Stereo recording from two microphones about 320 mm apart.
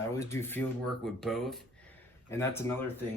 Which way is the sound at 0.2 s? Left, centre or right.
Centre.